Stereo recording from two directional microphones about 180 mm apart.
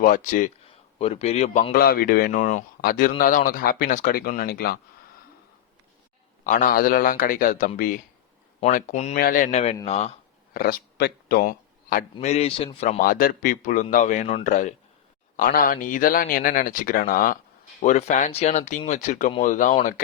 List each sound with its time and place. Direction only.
0.0 s speech: 50° left (ahead or behind)
0.9 s speech: 35° left (ahead or behind)
1.7 s speech: 55° left (ahead or behind)
6.4 s speech: 45° left (ahead or behind)
8.6 s speech: 40° left (ahead or behind)
9.1 s speech: 50° left (ahead or behind); by 10.1 s 35° left (ahead or behind)
10.5 s a man's voice: 55° left (ahead or behind)
12.2 s speech: 35° left (ahead or behind)
13.0 s speech: 55° left (ahead or behind)